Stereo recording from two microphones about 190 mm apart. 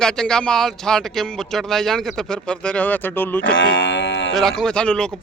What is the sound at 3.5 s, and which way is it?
Speech, 75° left (ahead or behind).